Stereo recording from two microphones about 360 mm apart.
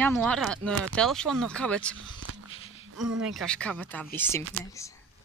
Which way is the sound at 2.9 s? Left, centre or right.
Right.